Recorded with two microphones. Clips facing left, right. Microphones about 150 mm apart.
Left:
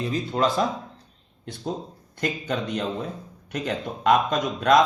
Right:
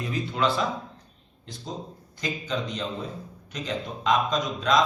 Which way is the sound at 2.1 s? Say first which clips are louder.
Left 3 dB; 60° left (ahead or behind).